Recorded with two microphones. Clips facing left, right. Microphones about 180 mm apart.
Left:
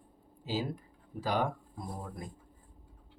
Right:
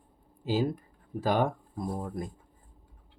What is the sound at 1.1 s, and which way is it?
Speech, 50° right (ahead or behind).